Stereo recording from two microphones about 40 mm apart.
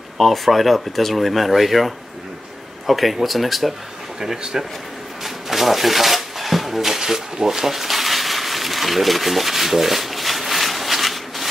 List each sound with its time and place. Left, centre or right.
0.2 s speech: centre
4.2 s speech: centre
5.2 s a sound: centre